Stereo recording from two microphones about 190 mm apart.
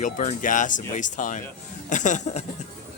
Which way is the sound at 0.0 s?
40° left (ahead or behind).